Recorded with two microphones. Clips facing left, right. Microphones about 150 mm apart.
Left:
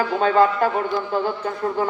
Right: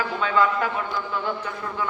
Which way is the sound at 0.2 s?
40° left (ahead or behind).